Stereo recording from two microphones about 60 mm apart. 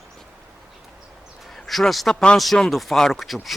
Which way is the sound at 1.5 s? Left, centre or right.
Centre.